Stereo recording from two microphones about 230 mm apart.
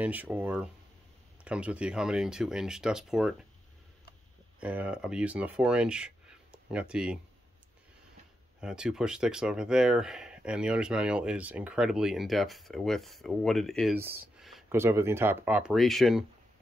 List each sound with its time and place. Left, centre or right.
0.0 s speech: centre
4.6 s speech: centre
8.5 s speech: centre
13.9 s speech: centre
14.4 s a sound: centre
14.8 s speech: centre